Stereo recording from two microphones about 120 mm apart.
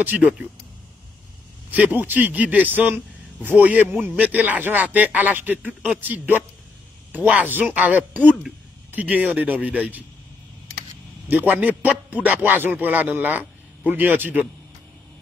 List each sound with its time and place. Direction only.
0.0 s a man's voice: 10° right (ahead or behind)
1.7 s a man's voice: 15° right (ahead or behind)
11.2 s a man's voice: 15° right (ahead or behind)